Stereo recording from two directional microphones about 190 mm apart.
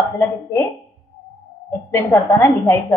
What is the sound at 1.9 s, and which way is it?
A woman's voice, 15° left (ahead or behind).